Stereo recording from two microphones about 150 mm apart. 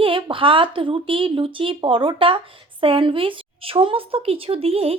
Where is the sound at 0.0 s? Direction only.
35° right (ahead or behind).